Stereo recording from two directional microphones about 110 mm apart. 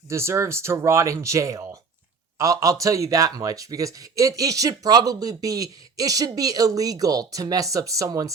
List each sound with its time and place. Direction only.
0.1 s speech: 25° right (ahead or behind)